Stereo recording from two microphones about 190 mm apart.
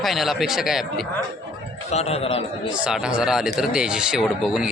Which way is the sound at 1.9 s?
35° left (ahead or behind).